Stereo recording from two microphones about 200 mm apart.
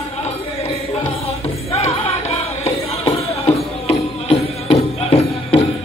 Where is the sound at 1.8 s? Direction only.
30° left (ahead or behind).